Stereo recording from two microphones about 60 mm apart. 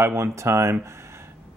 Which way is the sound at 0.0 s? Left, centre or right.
Right.